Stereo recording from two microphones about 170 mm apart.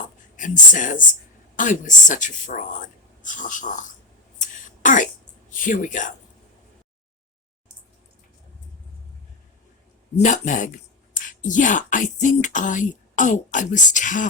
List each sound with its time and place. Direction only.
0.3 s speech: 50° left (ahead or behind)
4.4 s a sound: 50° left (ahead or behind)
5.5 s speech: 50° left (ahead or behind)
10.2 s speech: 45° left (ahead or behind)